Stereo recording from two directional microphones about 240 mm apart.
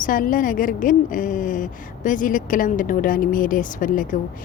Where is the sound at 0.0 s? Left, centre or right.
Left.